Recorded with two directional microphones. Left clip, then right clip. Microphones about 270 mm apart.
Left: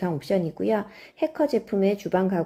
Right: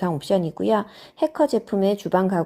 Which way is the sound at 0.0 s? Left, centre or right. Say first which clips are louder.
Right 3 dB; centre.